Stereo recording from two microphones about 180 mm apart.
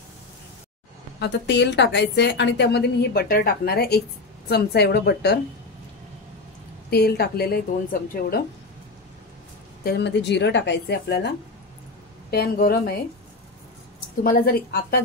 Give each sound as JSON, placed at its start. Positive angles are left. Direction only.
{"t": 1.2, "sound": "a woman's voice", "side_deg": 75}
{"t": 6.9, "sound": "speech", "side_deg": 60}
{"t": 9.8, "sound": "a woman's voice", "side_deg": 70}
{"t": 14.2, "sound": "speech", "side_deg": 55}